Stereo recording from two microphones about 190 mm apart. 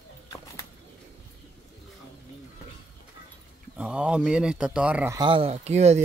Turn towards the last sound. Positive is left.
turn(degrees=-35)  # may be behind; listen again after turning